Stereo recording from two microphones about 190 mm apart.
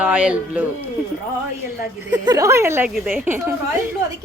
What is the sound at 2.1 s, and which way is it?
Speech, 20° right (ahead or behind).